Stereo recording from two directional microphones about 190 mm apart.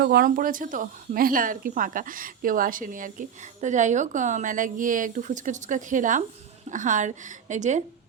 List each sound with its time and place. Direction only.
0.0 s a woman's voice: 55° right (ahead or behind); by 7.8 s 40° right (ahead or behind)